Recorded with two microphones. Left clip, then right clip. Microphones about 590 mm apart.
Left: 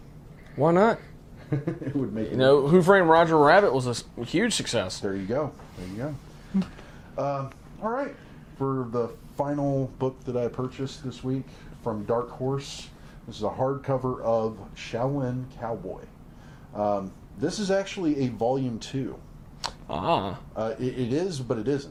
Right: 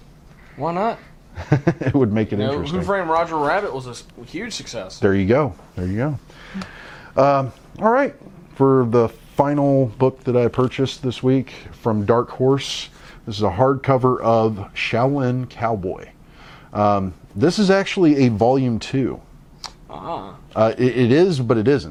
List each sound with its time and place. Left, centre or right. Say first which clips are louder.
0.6 s speech: left 1 dB; left
1.5 s speech: right 11 dB; right
2.4 s speech: left 5 dB; centre
5.0 s speech: right 11 dB; right
7.2 s speech: right 14 dB; right
16.7 s speech: right 9 dB; right
19.6 s a sound: left 4 dB; left
20.6 s speech: right 13 dB; right